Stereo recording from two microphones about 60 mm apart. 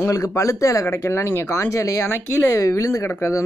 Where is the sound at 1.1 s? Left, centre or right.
Left.